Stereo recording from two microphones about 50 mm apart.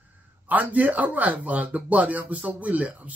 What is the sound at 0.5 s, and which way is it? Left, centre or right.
Speech, right.